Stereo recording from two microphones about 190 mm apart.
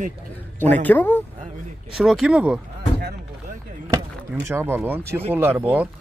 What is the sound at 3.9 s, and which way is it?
Speech, 15° right (ahead or behind).